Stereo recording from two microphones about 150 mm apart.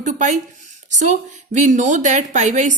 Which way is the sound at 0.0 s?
55° right (ahead or behind).